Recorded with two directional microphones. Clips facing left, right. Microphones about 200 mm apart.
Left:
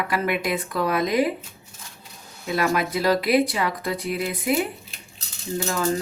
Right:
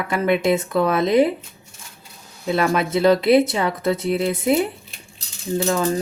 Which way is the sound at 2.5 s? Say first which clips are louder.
Right 3 dB; 30° right (ahead or behind).